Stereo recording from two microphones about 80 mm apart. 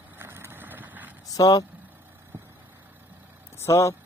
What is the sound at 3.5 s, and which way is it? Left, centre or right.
Speech, left.